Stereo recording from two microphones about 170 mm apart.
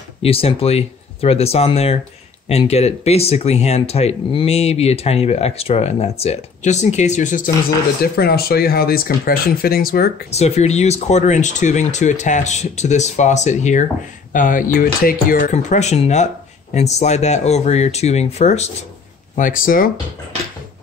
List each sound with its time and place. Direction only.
0.2 s speech: 35° left (ahead or behind)
8.0 s speech: 65° left (ahead or behind)
10.3 s speech: 40° left (ahead or behind)
19.3 s speech: 50° left (ahead or behind)